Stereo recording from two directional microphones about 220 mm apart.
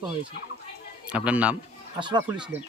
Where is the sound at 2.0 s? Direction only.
20° right (ahead or behind).